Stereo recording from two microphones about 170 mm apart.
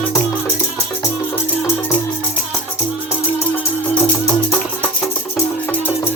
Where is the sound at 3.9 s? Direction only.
15° left (ahead or behind).